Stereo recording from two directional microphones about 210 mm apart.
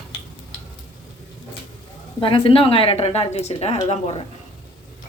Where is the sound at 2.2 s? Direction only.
25° left (ahead or behind).